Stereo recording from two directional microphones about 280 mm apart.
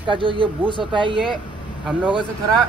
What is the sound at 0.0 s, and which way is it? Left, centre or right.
Speech, centre.